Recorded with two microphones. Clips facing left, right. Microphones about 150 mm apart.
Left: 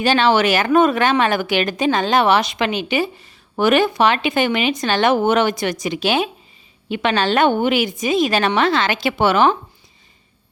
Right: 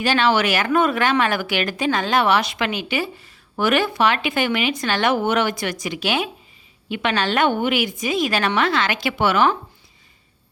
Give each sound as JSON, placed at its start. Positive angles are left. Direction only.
{"t": 0.0, "sound": "speech", "side_deg": 25}